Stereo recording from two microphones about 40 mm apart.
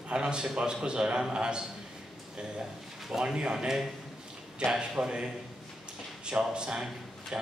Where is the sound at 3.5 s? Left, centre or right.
Centre.